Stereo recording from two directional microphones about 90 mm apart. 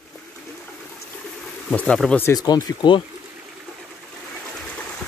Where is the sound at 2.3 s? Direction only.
45° left (ahead or behind).